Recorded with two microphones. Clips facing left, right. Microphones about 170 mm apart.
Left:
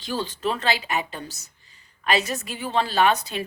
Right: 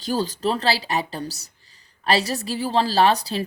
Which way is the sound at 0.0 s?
40° right (ahead or behind).